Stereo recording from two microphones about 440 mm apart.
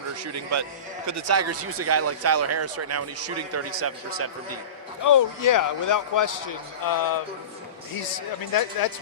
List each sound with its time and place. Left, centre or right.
1.0 s speech: right
5.0 s speech: left
8.5 s speech: left